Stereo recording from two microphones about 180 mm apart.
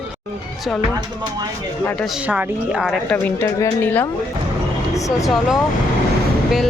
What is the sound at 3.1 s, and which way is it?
Speech, 15° left (ahead or behind).